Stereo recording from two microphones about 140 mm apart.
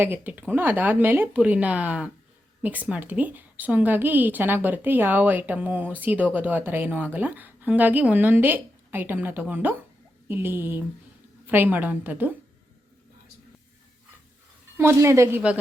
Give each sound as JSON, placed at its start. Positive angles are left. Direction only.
{"t": 0.0, "sound": "a woman's voice", "side_deg": -15}
{"t": 14.8, "sound": "a woman's voice", "side_deg": -20}